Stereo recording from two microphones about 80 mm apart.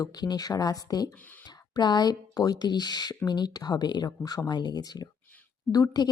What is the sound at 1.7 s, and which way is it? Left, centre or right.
A woman's voice, left.